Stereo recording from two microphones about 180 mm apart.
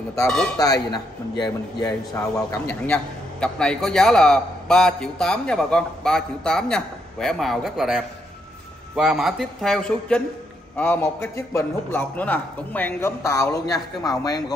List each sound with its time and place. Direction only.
0.6 s a man's voice: 20° left (ahead or behind)
2.7 s a man's voice: 5° left (ahead or behind); by 14.4 s 20° left (ahead or behind)